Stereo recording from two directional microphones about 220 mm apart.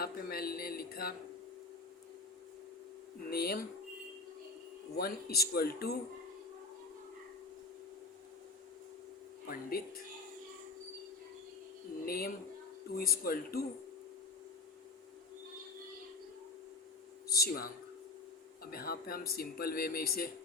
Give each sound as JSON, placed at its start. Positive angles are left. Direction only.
{"t": 0.0, "sound": "speech", "side_deg": 45}
{"t": 3.2, "sound": "speech", "side_deg": 45}
{"t": 4.9, "sound": "speech", "side_deg": 45}
{"t": 9.5, "sound": "speech", "side_deg": 40}
{"t": 12.0, "sound": "speech", "side_deg": 45}
{"t": 17.2, "sound": "speech", "side_deg": 45}